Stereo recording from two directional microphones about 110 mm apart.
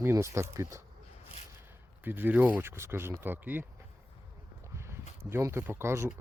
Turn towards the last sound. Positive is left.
turn(degrees=-25)  # may be behind; listen again after turning